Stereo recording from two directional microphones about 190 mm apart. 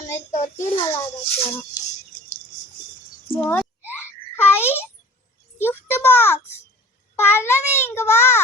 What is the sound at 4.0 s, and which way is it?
Babbling, 10° left (ahead or behind).